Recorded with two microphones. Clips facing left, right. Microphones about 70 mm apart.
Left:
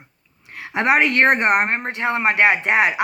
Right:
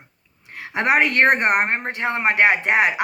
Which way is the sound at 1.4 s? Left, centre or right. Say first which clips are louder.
Left 1 dB; left.